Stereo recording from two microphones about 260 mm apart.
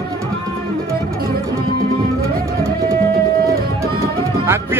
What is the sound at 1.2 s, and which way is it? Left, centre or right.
Music, right.